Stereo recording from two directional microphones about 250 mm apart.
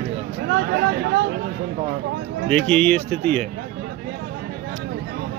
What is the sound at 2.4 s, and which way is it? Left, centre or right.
Speech, centre.